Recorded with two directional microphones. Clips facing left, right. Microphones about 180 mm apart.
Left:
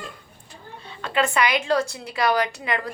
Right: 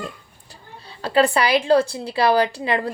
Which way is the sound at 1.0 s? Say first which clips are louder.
Right 4 dB; 35° right (ahead or behind).